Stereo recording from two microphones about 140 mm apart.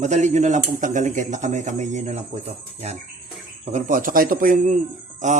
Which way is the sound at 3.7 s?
70° right (ahead or behind).